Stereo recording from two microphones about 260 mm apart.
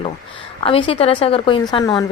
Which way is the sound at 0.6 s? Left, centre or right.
Left.